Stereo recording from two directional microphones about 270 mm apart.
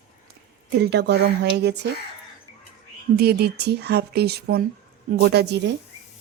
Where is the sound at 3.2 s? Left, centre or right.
Right.